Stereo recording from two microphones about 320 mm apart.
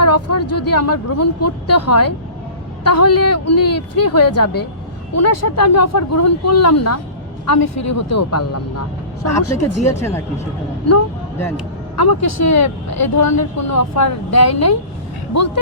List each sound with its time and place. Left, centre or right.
0.0 s speech: left
9.9 s speech: centre
11.9 s speech: left